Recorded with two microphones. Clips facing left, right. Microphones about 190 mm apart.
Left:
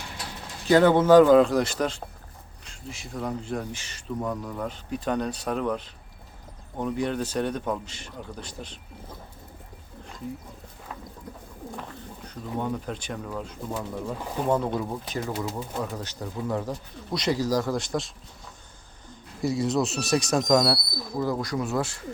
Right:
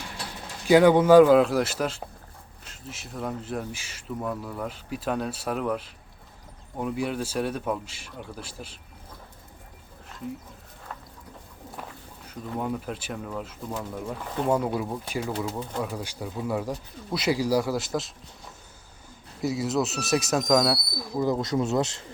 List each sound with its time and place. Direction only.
0.7 s speech: 10° right (ahead or behind)
12.2 s speech: 5° right (ahead or behind)
19.4 s speech: centre (ahead or behind)
21.2 s speech: 20° right (ahead or behind)